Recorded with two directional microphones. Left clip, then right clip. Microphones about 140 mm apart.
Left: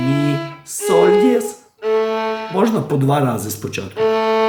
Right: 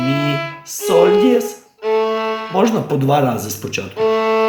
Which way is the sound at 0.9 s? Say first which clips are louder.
Right 1 dB; 40° left (ahead or behind).